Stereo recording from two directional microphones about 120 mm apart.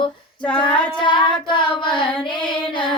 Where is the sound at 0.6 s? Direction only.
40° left (ahead or behind).